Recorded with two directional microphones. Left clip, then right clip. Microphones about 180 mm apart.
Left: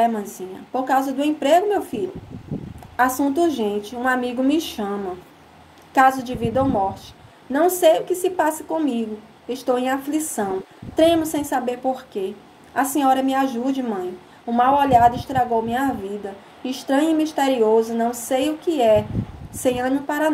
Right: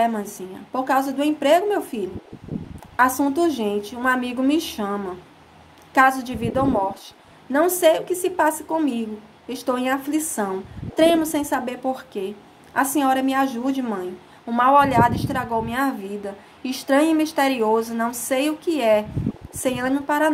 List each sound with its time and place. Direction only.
0.0 s a woman's voice: 30° right (ahead or behind)
3.0 s a woman's voice: 30° right (ahead or behind)
5.9 s a woman's voice: 30° right (ahead or behind)